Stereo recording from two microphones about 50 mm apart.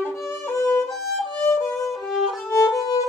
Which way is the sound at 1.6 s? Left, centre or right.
Left.